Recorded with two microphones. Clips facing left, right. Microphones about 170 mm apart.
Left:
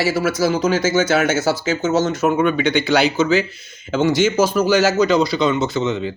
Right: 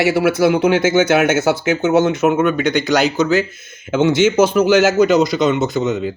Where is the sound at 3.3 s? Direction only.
50° right (ahead or behind).